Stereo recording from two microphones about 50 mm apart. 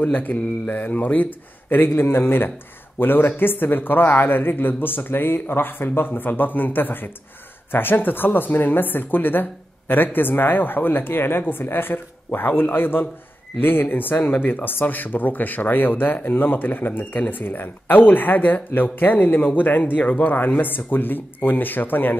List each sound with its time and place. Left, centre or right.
0.0 s speech: left
2.0 s speech: left